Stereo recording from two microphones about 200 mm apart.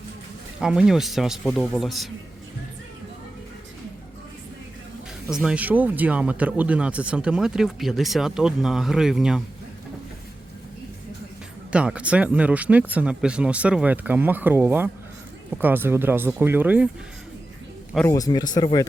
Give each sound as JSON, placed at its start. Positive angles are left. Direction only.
{"t": 0.6, "sound": "speech", "side_deg": -5}
{"t": 5.3, "sound": "speech", "side_deg": -5}
{"t": 11.7, "sound": "speech", "side_deg": -5}
{"t": 18.1, "sound": "speech", "side_deg": 20}